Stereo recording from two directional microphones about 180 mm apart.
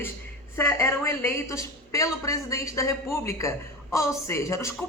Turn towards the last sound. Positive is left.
turn(degrees=15)  # may be behind; listen again after turning